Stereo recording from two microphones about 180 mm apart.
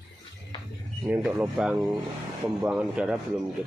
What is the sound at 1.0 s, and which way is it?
Speech, 10° right (ahead or behind).